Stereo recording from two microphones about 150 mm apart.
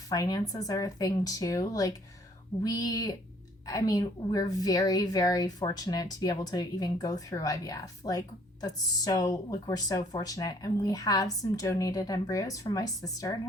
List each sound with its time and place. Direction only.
0.1 s speech: 25° left (ahead or behind)